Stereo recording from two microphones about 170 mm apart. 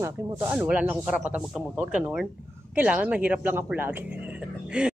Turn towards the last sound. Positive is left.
turn(degrees=-5)  # may be behind; listen again after turning